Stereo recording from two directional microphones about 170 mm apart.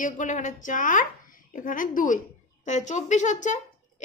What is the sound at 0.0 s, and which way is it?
A woman's voice, 45° left (ahead or behind).